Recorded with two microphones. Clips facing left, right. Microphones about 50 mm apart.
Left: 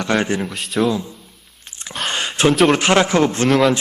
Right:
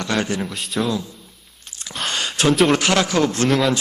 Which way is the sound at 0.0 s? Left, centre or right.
Left.